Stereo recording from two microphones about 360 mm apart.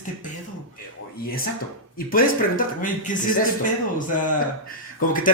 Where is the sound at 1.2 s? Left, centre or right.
Left.